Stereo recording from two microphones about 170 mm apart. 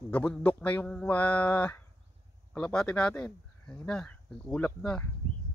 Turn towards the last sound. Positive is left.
turn(degrees=5)  # may be behind; listen again after turning